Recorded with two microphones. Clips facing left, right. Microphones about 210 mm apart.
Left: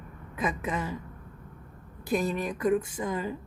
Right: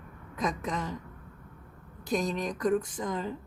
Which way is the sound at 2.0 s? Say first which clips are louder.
Left 2 dB; 5° left (ahead or behind).